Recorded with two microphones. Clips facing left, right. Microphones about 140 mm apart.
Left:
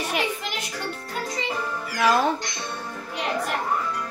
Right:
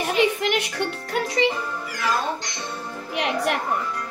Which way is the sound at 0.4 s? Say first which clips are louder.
Right 8 dB; 65° right (ahead or behind).